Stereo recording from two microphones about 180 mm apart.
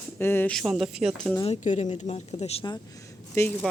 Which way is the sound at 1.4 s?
35° left (ahead or behind).